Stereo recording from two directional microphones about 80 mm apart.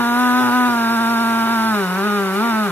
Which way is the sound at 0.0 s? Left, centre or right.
Left.